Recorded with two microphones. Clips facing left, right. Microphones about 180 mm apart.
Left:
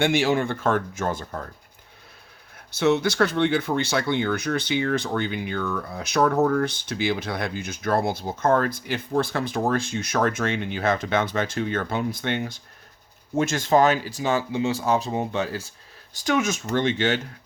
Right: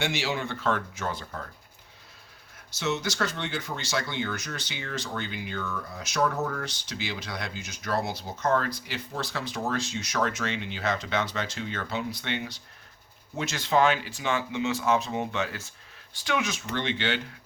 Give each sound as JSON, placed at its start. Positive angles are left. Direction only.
{"t": 0.0, "sound": "speech", "side_deg": 50}
{"t": 2.7, "sound": "speech", "side_deg": 55}